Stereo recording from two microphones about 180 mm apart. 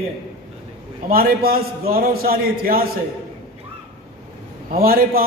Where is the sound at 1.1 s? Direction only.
55° right (ahead or behind).